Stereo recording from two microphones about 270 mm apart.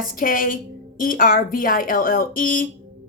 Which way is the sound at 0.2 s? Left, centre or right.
Left.